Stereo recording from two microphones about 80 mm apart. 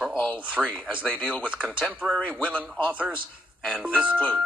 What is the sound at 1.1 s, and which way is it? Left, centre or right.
A man's voice, centre.